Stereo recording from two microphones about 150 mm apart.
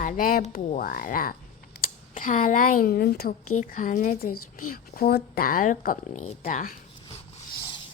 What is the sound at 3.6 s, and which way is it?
Speech, 65° left (ahead or behind).